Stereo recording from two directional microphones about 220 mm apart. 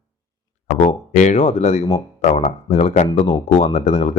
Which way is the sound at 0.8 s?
30° left (ahead or behind).